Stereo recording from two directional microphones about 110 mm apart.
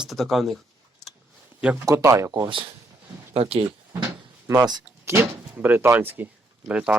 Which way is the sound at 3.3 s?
60° right (ahead or behind).